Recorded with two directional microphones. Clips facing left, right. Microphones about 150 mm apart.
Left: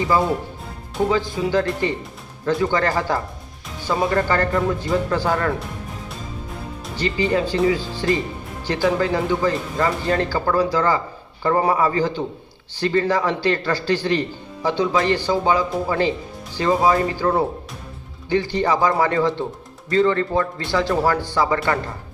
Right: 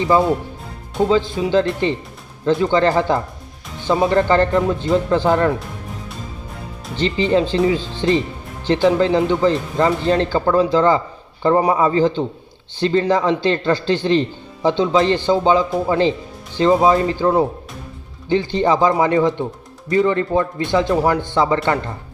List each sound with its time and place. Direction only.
1.1 s speech: 20° right (ahead or behind)
6.9 s speech: 25° right (ahead or behind)